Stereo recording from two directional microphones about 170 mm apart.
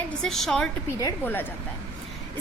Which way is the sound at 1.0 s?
15° left (ahead or behind).